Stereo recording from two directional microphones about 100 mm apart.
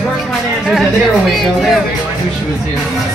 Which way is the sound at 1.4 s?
5° right (ahead or behind).